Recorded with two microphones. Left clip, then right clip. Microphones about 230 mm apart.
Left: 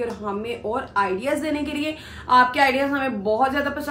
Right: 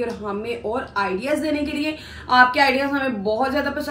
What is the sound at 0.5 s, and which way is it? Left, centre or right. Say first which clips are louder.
A woman's voice: right 3 dB; centre.